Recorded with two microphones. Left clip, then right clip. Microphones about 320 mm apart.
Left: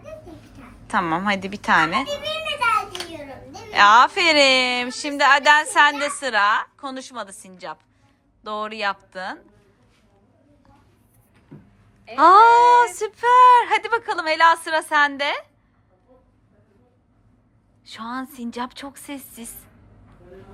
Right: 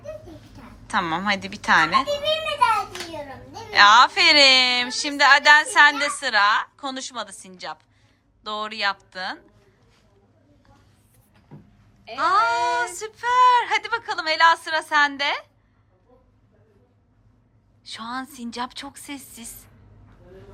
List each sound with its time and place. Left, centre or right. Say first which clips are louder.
0.9 s a woman's voice: left 2 dB; centre
3.7 s a woman's voice: even; centre
12.1 s a woman's voice: left 9 dB; centre
17.8 s a woman's voice: even; centre